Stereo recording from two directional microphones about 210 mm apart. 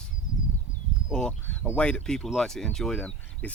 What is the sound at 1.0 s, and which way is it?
Speech, 5° left (ahead or behind).